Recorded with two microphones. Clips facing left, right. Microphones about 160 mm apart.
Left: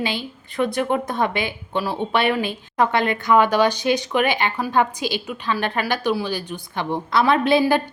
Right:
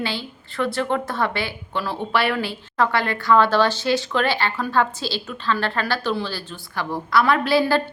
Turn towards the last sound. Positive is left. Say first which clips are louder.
# left 2 dB
turn(degrees=20)  # may be behind; listen again after turning